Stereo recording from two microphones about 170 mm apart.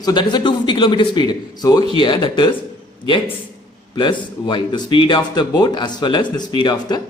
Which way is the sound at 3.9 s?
30° left (ahead or behind).